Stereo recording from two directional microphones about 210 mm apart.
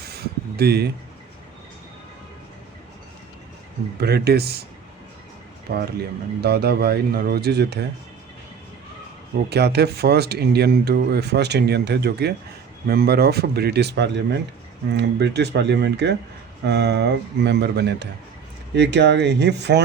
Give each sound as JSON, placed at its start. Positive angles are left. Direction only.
{"t": 0.0, "sound": "a sound", "side_deg": -50}
{"t": 4.0, "sound": "speech", "side_deg": -50}
{"t": 5.7, "sound": "speech", "side_deg": -45}
{"t": 9.5, "sound": "speech", "side_deg": -50}